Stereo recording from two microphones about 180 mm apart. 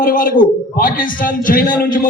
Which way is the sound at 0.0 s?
50° left (ahead or behind).